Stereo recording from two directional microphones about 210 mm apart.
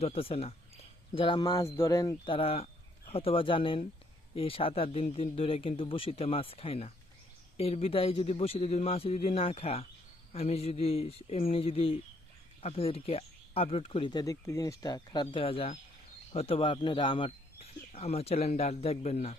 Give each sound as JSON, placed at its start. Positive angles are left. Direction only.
{"t": 0.0, "sound": "speech", "side_deg": 25}